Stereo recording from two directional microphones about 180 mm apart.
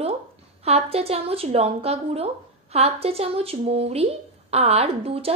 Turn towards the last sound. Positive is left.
turn(degrees=-35)  # may be behind; listen again after turning